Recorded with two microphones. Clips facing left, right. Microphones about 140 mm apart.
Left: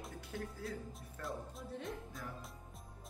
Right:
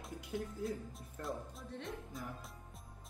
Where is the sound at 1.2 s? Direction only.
Centre (ahead or behind).